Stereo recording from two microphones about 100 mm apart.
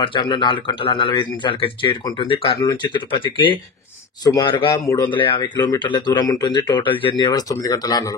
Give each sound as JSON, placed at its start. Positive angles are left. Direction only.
{"t": 0.0, "sound": "speech", "side_deg": 50}
{"t": 2.6, "sound": "speech", "side_deg": 45}
{"t": 4.2, "sound": "a man's voice", "side_deg": 40}
{"t": 5.1, "sound": "speech", "side_deg": 55}